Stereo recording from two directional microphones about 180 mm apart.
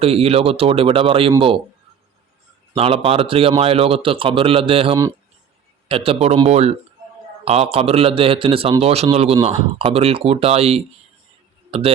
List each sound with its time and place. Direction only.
0.0 s a man's voice: 35° right (ahead or behind)
2.7 s a man's voice: 30° right (ahead or behind)